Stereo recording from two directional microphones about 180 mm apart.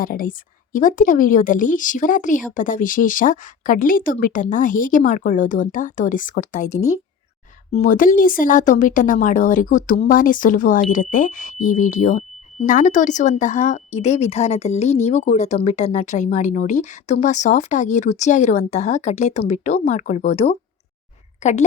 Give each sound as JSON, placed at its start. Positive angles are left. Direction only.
{"t": 0.0, "sound": "speech", "side_deg": 50}